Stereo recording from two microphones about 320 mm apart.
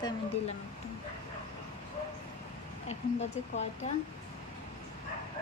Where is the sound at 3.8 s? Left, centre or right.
Left.